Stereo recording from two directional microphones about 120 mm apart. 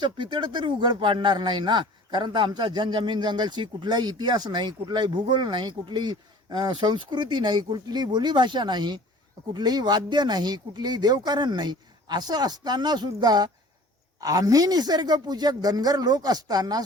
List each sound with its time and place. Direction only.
0.0 s speech: 40° right (ahead or behind)